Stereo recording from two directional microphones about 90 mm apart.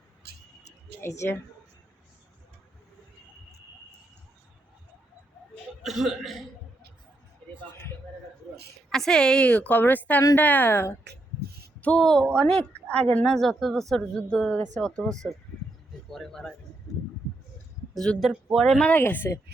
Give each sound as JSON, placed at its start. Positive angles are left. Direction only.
{"t": 1.0, "sound": "speech", "side_deg": 30}
{"t": 5.8, "sound": "speech", "side_deg": 0}
{"t": 8.9, "sound": "speech", "side_deg": 5}
{"t": 9.5, "sound": "speech", "side_deg": 20}
{"t": 11.8, "sound": "speech", "side_deg": 10}
{"t": 17.9, "sound": "speech", "side_deg": 5}
{"t": 18.9, "sound": "speech", "side_deg": 20}